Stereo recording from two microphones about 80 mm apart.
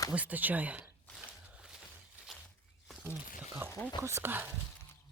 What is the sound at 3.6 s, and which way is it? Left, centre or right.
Speech, right.